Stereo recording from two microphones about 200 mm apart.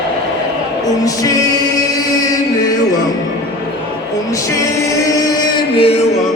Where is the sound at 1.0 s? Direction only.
15° left (ahead or behind).